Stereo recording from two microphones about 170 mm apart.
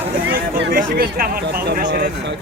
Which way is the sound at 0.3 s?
60° right (ahead or behind).